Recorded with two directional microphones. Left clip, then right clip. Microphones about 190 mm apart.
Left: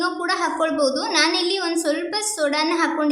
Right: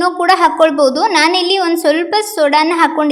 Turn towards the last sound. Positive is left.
turn(degrees=-30)  # may be behind; listen again after turning